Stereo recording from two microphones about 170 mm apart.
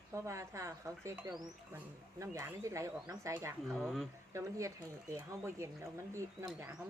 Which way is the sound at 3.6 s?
Centre (ahead or behind).